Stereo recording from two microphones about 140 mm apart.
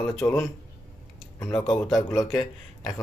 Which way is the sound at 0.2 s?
25° left (ahead or behind).